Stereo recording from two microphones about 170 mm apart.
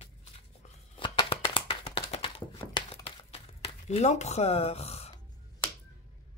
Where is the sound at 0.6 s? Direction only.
30° left (ahead or behind).